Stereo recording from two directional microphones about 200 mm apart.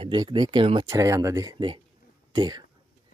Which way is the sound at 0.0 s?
25° right (ahead or behind).